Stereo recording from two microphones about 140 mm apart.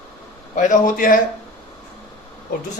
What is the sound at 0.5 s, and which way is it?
Speech, 65° left (ahead or behind).